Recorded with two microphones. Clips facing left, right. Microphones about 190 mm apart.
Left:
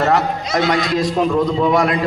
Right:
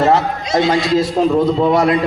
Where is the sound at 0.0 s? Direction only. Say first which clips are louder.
Right 2 dB; 25° right (ahead or behind).